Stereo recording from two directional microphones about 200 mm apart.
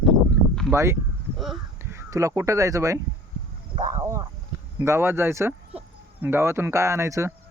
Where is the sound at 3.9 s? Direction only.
15° right (ahead or behind).